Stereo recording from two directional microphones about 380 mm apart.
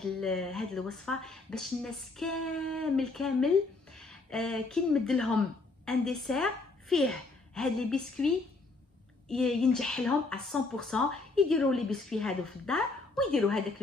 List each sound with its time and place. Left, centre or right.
0.0 s a woman's voice: centre
9.3 s speech: centre